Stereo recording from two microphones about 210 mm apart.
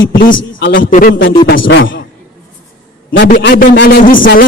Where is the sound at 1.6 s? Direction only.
65° left (ahead or behind).